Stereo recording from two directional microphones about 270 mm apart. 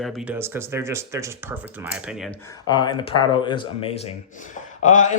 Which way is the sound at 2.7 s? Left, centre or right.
Centre.